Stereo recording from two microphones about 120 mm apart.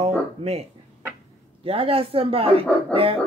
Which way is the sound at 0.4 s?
60° right (ahead or behind).